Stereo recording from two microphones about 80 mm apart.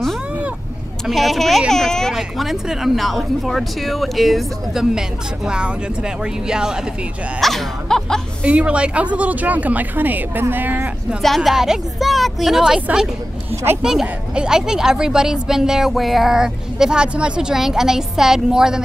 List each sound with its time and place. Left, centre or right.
1.0 s speech: centre
2.1 s speech: centre
7.3 s speech: centre
8.5 s a woman's voice: centre
11.2 s speech: centre
13.8 s a woman's voice: centre